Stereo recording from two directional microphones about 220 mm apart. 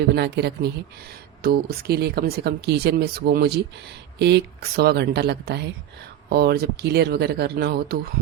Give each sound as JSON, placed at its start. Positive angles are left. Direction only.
{"t": 0.1, "sound": "speech", "side_deg": -50}